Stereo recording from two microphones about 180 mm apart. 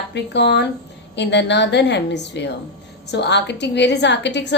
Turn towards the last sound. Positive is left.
turn(degrees=75)  # may be behind; listen again after turning